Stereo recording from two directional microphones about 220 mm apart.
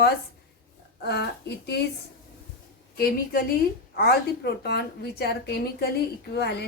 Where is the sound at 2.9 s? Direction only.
45° left (ahead or behind).